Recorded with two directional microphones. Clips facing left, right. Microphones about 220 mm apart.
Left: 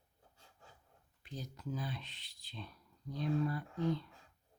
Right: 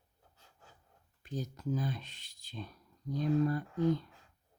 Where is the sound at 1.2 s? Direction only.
45° right (ahead or behind).